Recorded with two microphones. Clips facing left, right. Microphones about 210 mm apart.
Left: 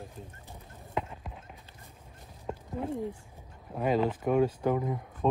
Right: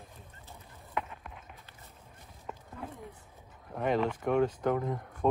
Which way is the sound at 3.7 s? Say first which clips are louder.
Left 2 dB; 5° left (ahead or behind).